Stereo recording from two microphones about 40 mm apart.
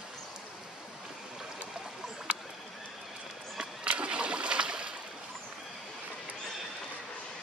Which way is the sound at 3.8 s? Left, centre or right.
Right.